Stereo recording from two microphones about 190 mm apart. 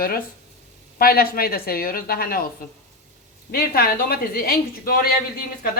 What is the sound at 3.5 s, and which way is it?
Speech, 50° left (ahead or behind).